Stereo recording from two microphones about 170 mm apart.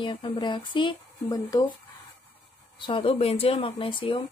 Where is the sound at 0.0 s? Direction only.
30° left (ahead or behind).